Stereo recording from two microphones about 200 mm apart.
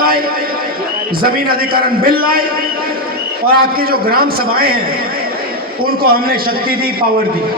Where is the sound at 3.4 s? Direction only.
50° right (ahead or behind).